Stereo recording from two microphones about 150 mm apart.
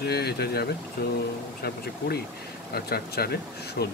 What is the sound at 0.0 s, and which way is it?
Speech, 90° left.